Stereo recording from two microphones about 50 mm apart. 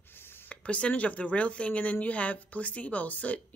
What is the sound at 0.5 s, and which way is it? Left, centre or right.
Speech, left.